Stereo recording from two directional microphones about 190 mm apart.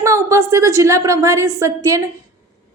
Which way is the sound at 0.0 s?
15° right (ahead or behind).